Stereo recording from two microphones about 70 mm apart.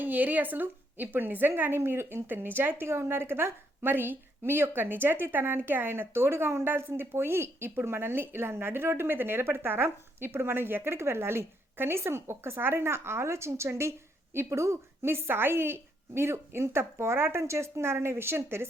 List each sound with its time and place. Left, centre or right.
0.0 s a woman's voice: right